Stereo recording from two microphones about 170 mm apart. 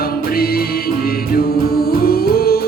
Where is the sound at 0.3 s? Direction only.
60° left (ahead or behind).